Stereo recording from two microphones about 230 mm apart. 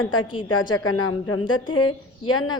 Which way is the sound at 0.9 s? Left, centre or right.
Left.